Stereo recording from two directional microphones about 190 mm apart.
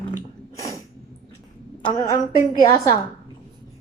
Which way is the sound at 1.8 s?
20° left (ahead or behind).